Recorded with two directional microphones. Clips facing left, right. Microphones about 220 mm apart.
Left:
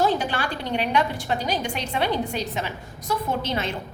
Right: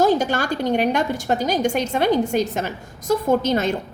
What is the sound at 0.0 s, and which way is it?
A woman's voice, 45° right (ahead or behind).